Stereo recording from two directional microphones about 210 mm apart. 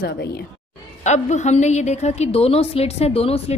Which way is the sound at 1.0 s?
35° left (ahead or behind).